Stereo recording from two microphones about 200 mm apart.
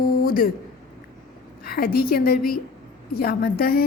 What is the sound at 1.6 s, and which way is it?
A woman's voice, 50° left (ahead or behind).